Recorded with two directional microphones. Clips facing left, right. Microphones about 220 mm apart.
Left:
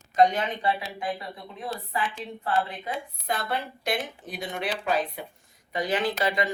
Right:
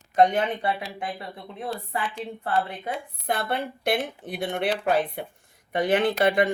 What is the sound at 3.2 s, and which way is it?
A woman's voice, 55° right (ahead or behind).